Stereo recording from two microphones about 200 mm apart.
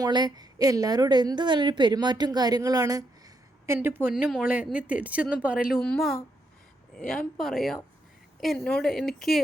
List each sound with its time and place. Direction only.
0.0 s a woman's voice: 20° right (ahead or behind); by 6.1 s 5° left (ahead or behind)
7.3 s speech: centre (ahead or behind)